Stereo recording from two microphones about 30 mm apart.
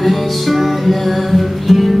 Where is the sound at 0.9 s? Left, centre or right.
Centre.